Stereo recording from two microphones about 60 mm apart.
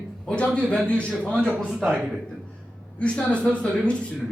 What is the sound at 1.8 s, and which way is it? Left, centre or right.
Speech, right.